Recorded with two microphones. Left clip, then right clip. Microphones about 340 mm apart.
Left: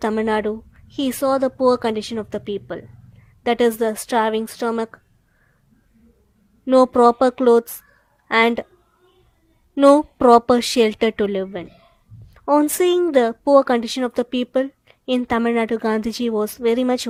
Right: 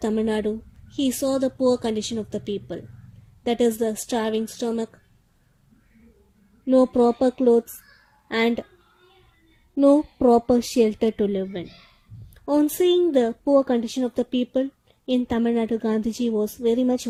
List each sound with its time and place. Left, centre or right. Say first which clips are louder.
0.0 s a woman's voice: left 4 dB; left
6.7 s speech: left 5 dB; left
9.7 s speech: left 5 dB; left